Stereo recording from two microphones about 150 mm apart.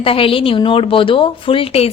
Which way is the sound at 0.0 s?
40° left (ahead or behind).